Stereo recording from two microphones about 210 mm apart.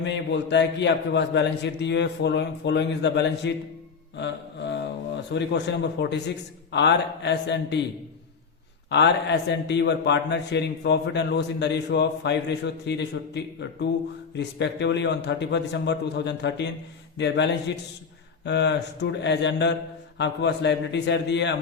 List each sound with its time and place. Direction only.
0.0 s a man's voice: 55° left (ahead or behind)
4.2 s mantra: 55° left (ahead or behind)
5.3 s a man's voice: 55° left (ahead or behind)
8.9 s a man's voice: 55° left (ahead or behind)